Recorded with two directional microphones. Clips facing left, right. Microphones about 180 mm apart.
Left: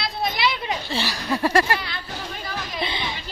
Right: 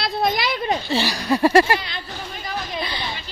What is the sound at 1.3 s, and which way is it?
Speech, 30° right (ahead or behind).